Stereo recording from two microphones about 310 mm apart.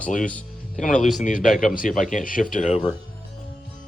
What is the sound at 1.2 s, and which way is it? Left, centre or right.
Speech, left.